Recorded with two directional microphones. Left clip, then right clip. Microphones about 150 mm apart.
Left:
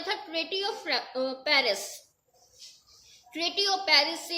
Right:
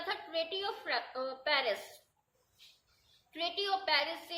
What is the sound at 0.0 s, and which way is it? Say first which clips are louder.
A woman's voice: left 4 dB; 35° left (ahead or behind).